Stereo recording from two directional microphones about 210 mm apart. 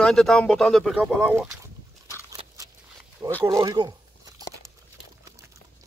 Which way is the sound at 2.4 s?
30° right (ahead or behind).